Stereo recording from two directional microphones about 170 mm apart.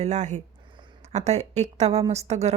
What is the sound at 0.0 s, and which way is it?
Speech, 45° right (ahead or behind).